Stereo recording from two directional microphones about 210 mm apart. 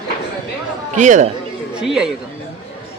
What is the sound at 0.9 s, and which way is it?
Speech, 35° right (ahead or behind).